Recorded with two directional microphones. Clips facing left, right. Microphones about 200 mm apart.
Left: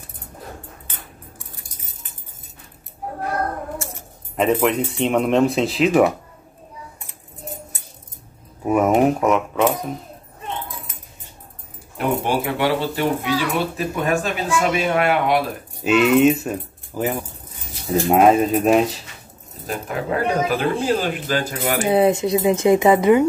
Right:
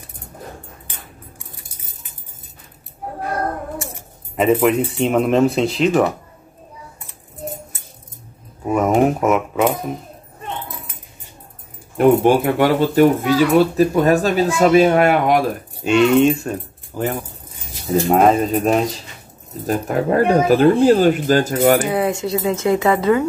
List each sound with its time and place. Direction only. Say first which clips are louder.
4.4 s speech: right 3 dB; 5° right (ahead or behind)
8.6 s speech: even; 5° left (ahead or behind)
12.2 s speech: right 7 dB; 45° right (ahead or behind)
15.8 s speech: right 1 dB; 5° left (ahead or behind)
19.6 s speech: right 7 dB; 45° right (ahead or behind)
21.9 s speech: left 3 dB; 20° left (ahead or behind)